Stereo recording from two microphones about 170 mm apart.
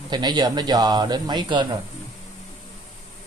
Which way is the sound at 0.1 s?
25° right (ahead or behind).